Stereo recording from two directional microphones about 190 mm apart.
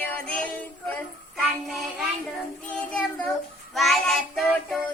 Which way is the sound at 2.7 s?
5° left (ahead or behind).